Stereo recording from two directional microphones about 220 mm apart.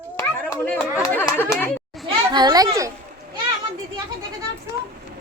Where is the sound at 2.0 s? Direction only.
20° right (ahead or behind).